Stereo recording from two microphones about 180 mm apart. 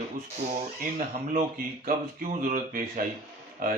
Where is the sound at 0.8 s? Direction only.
50° right (ahead or behind).